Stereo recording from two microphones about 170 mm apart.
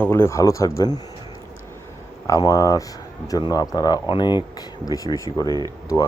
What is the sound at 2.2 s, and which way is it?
Speech, 20° left (ahead or behind).